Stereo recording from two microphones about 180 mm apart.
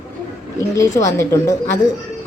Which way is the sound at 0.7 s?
15° left (ahead or behind).